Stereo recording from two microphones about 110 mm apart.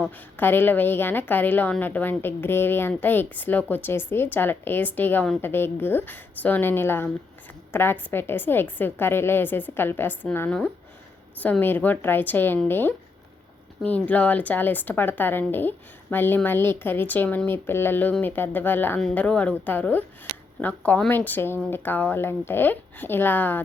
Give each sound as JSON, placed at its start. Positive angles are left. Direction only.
{"t": 0.3, "sound": "a woman's voice", "side_deg": 20}
{"t": 11.6, "sound": "a woman's voice", "side_deg": 15}